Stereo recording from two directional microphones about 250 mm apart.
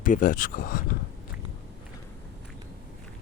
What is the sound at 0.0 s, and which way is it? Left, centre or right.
Speech, left.